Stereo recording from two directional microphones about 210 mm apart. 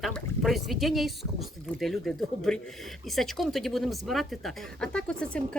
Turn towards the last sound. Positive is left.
turn(degrees=5)  # may be behind; listen again after turning